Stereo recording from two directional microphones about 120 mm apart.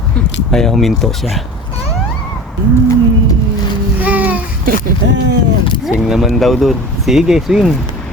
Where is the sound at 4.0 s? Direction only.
15° right (ahead or behind).